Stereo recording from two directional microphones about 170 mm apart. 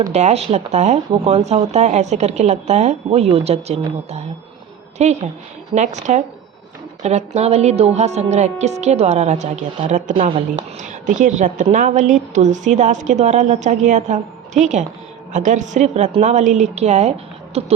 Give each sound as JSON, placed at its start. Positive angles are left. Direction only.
{"t": 0.0, "sound": "a woman's voice", "side_deg": -40}
{"t": 10.2, "sound": "speech", "side_deg": -35}
{"t": 10.8, "sound": "a woman's voice", "side_deg": -50}